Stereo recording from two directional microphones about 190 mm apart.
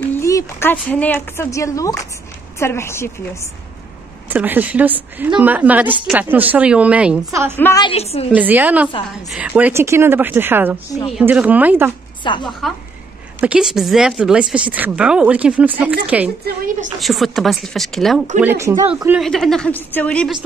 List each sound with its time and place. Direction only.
0.1 s a woman's voice: 15° left (ahead or behind)
4.3 s a woman's voice: 10° right (ahead or behind)
7.5 s a woman's voice: 10° left (ahead or behind)
7.8 s a woman's voice: 30° left (ahead or behind)
8.4 s a woman's voice: 10° right (ahead or behind)
12.2 s speech: 25° left (ahead or behind)
13.4 s a woman's voice: 5° right (ahead or behind)
17.0 s speech: centre (ahead or behind)
18.4 s a woman's voice: 10° right (ahead or behind)
19.2 s speech: centre (ahead or behind)